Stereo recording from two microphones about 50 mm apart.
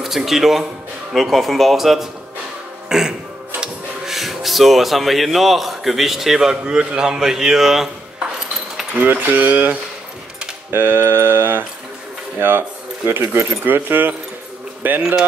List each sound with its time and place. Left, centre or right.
0.0 s speech: centre
2.9 s music: centre
3.6 s speech: centre
9.0 s speech: right
10.7 s a sound: right
12.4 s speech: right
13.7 s a sound: right
14.8 s speech: right